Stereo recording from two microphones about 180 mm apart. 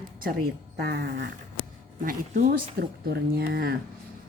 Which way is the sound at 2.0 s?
50° right (ahead or behind).